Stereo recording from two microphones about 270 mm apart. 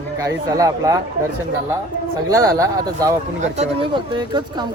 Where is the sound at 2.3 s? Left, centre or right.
Centre.